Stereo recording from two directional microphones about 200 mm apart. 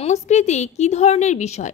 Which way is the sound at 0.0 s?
35° left (ahead or behind).